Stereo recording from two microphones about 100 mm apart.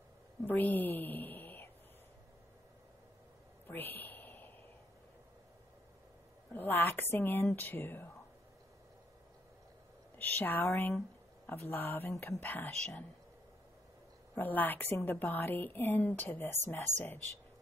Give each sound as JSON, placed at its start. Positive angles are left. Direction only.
{"t": 0.5, "sound": "a woman's voice", "side_deg": 15}
{"t": 3.6, "sound": "a sound", "side_deg": 20}
{"t": 6.5, "sound": "speech", "side_deg": 20}
{"t": 10.1, "sound": "a woman's voice", "side_deg": 15}
{"t": 14.3, "sound": "a woman's voice", "side_deg": 15}